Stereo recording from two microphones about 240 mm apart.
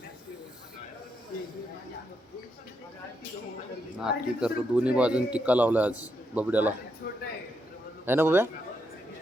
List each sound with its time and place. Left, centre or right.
4.0 s a man's voice: centre
7.0 s a sound: left
8.0 s a man's voice: centre